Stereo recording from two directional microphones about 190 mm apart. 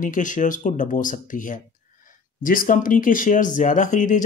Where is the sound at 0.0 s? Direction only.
45° left (ahead or behind).